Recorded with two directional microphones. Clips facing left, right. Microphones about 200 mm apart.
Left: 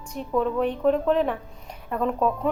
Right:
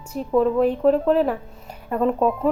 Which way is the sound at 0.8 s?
5° right (ahead or behind).